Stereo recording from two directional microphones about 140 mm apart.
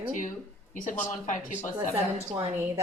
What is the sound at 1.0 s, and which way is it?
Speech, 60° left (ahead or behind).